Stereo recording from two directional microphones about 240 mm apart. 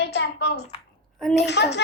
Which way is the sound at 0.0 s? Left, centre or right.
Left.